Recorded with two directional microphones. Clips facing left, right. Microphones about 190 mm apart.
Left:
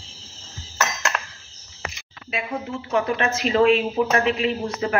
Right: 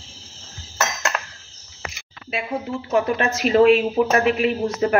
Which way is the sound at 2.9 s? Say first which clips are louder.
Right 2 dB; 40° right (ahead or behind).